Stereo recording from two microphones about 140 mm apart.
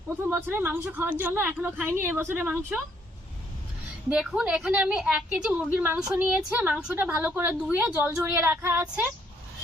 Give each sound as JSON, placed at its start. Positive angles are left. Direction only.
{"t": 0.3, "sound": "a woman's voice", "side_deg": -15}
{"t": 4.1, "sound": "a woman's voice", "side_deg": -5}